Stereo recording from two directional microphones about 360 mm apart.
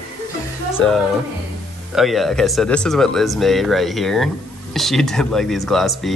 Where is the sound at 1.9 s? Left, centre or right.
Centre.